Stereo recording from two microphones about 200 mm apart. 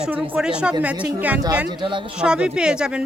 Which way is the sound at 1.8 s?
25° right (ahead or behind).